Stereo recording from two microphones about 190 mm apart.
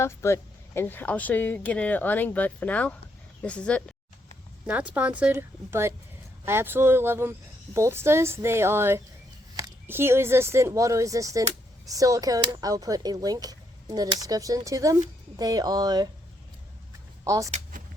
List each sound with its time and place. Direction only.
0.0 s speech: 15° left (ahead or behind)
4.6 s speech: 10° right (ahead or behind)
17.2 s speech: 15° right (ahead or behind)
17.5 s a sound: 45° right (ahead or behind)